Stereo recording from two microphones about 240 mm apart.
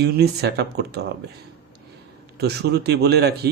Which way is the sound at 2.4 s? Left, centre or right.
Right.